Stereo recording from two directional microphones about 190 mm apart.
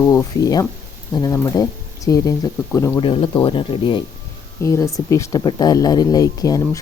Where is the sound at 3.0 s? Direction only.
25° left (ahead or behind).